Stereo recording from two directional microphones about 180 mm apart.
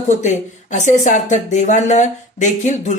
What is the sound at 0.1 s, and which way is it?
Speech, 40° left (ahead or behind).